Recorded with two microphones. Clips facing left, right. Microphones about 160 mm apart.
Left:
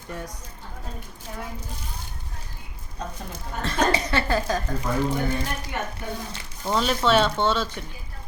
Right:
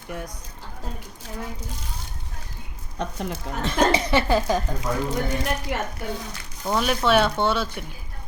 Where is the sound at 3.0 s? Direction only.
80° right.